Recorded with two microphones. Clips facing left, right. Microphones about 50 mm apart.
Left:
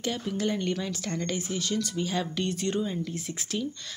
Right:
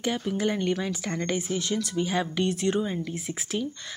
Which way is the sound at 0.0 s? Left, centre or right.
Centre.